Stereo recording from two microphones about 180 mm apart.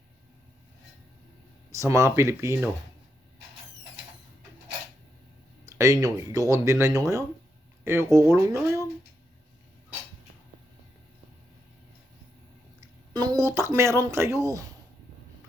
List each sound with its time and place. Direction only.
1.7 s speech: 15° right (ahead or behind)
5.6 s speech: 15° right (ahead or behind)
13.1 s speech: 20° right (ahead or behind)